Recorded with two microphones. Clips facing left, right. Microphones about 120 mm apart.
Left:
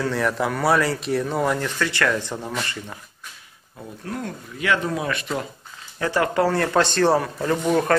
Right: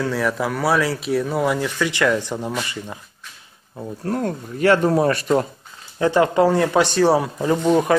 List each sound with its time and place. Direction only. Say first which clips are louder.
0.0 s speech: right 1 dB; centre (ahead or behind)
4.0 s speech: right 7 dB; 40° right (ahead or behind)
5.9 s speech: right 5 dB; 20° right (ahead or behind)